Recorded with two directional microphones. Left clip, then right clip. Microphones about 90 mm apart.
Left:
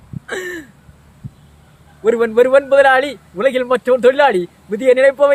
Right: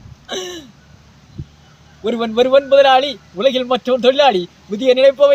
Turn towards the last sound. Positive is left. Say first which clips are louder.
# even
turn(degrees=40)  # may be behind; listen again after turning